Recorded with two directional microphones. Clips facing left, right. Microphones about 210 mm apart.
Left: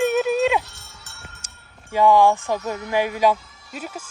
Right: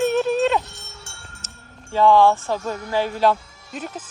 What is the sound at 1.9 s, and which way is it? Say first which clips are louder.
Speech: right 1 dB; 15° left (ahead or behind).